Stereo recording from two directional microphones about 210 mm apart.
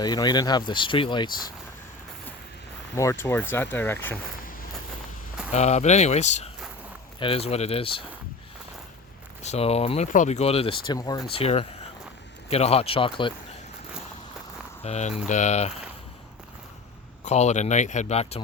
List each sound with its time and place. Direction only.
0.0 s speech: 20° left (ahead or behind)
2.9 s speech: 15° left (ahead or behind)
5.5 s speech: 30° left (ahead or behind)
9.4 s speech: 30° left (ahead or behind)
14.8 s speech: 30° left (ahead or behind)
17.2 s speech: 35° left (ahead or behind)